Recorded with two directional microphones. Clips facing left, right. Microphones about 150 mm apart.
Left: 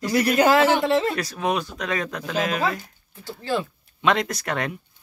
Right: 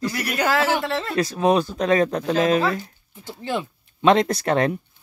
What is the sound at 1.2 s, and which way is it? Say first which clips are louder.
Speech: right 6 dB; 30° right (ahead or behind).